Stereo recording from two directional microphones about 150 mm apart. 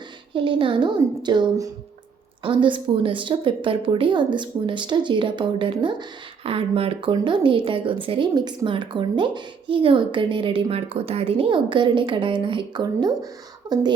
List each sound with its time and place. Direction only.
0.3 s a woman's voice: 35° right (ahead or behind)